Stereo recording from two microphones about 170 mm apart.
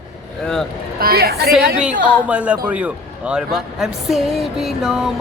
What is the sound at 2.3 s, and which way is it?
A man's voice, 10° right (ahead or behind).